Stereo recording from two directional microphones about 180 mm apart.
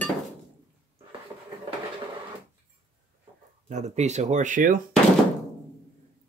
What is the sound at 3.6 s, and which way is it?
Speech, 40° right (ahead or behind).